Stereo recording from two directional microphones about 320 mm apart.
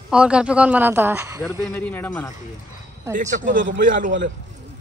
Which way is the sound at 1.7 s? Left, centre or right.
Centre.